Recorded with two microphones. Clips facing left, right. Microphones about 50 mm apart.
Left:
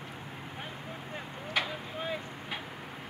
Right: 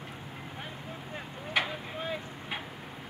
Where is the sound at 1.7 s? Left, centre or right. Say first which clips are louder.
Even; centre.